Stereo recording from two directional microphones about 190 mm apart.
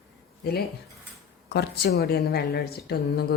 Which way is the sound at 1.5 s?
60° left (ahead or behind).